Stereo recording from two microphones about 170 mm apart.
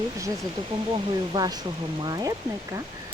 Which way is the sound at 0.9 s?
25° right (ahead or behind).